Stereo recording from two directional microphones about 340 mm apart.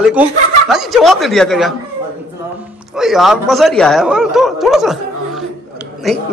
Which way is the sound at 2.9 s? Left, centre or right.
Centre.